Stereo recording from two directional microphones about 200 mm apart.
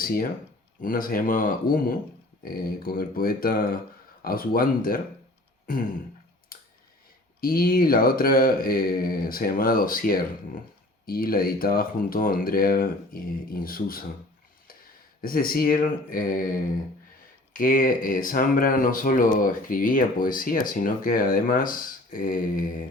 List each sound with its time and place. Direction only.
0.8 s speech: 45° left (ahead or behind)
6.5 s clicking: 45° left (ahead or behind)
7.4 s speech: 45° left (ahead or behind)
15.2 s speech: 45° left (ahead or behind)
17.5 s speech: 45° left (ahead or behind)